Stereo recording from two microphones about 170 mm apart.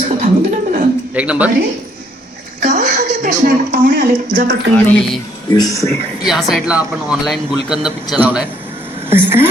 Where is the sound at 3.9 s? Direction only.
90° right.